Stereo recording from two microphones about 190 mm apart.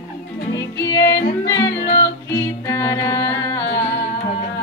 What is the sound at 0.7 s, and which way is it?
Music, 15° left (ahead or behind).